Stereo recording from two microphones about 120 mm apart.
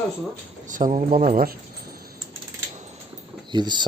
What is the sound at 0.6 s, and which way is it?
Speech, 90° right.